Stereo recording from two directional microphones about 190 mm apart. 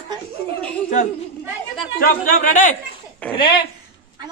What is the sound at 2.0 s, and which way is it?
Speech, 45° left (ahead or behind).